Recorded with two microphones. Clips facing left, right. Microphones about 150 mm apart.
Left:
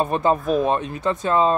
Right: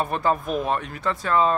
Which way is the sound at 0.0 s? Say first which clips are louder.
Left 4 dB; 20° left (ahead or behind).